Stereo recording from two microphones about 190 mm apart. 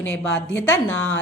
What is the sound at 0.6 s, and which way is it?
Speech, 10° left (ahead or behind).